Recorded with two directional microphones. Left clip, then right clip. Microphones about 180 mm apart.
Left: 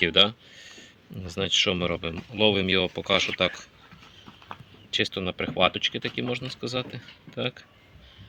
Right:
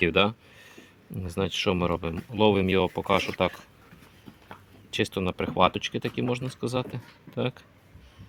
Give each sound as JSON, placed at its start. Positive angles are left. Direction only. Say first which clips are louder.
{"t": 0.0, "sound": "speech", "louder": "left 2 dB", "side_deg": -50}
{"t": 4.9, "sound": "speech", "louder": "left 1 dB", "side_deg": -50}